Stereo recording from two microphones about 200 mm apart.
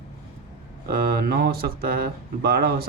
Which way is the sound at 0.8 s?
50° right (ahead or behind).